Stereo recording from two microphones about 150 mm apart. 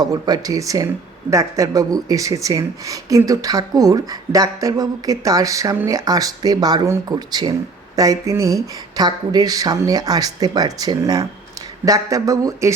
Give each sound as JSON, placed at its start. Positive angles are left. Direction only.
{"t": 0.0, "sound": "speech", "side_deg": -25}